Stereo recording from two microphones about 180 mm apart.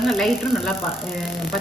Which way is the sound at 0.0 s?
Centre (ahead or behind).